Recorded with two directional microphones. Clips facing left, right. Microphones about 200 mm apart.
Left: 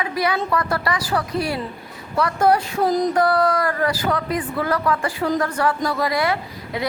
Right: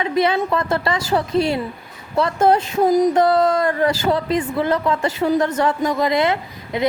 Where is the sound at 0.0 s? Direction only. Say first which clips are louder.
Right 4 dB; 25° right (ahead or behind).